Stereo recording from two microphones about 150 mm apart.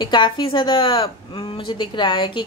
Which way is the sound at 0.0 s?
30° left (ahead or behind).